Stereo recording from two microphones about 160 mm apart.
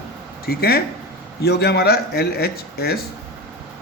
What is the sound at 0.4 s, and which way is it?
Speech, 75° left (ahead or behind).